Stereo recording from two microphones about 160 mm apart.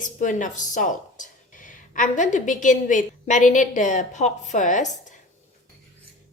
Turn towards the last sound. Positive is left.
turn(degrees=50)  # may be behind; listen again after turning